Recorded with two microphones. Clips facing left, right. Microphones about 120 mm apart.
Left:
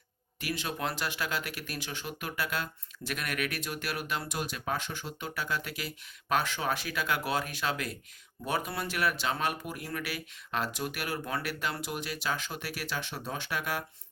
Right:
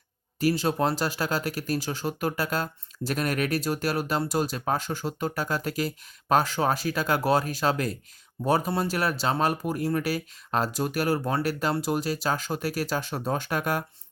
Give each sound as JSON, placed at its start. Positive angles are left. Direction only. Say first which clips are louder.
{"t": 0.3, "sound": "speech", "louder": "right 11 dB", "side_deg": -35}